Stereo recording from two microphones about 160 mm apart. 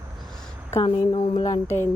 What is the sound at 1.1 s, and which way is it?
Speech, 30° left (ahead or behind).